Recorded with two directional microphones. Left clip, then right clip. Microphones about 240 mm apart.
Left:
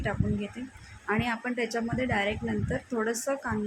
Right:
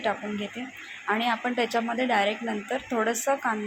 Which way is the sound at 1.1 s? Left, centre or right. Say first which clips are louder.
Right 4 dB; centre.